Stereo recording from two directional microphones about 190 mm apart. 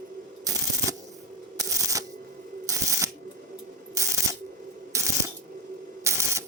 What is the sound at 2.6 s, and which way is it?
Shuffling cards, 15° right (ahead or behind).